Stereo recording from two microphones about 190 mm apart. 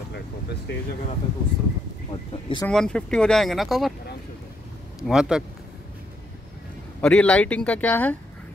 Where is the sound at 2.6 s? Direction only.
5° left (ahead or behind).